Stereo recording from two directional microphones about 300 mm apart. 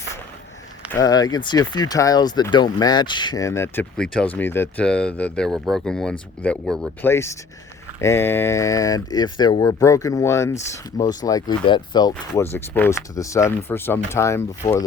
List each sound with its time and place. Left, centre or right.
0.9 s speech: centre